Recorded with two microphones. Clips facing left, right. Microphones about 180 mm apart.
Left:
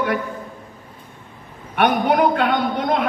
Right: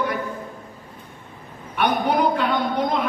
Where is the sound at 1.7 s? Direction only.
60° left (ahead or behind).